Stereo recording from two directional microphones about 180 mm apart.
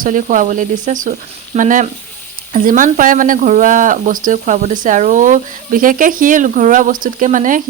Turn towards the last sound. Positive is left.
turn(degrees=-45)  # may be behind; listen again after turning